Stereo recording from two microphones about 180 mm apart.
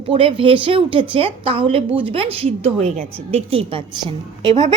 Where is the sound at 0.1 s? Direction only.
30° right (ahead or behind).